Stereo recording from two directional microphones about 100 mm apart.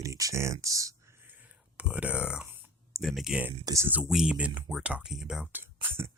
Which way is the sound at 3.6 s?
30° right (ahead or behind).